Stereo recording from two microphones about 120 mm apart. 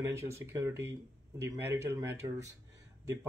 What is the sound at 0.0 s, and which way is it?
Speech, 25° right (ahead or behind).